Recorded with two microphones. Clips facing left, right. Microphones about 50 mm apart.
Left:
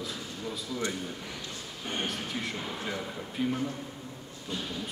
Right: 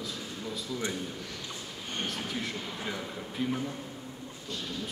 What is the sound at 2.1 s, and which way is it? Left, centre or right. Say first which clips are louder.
Speech: even; centre.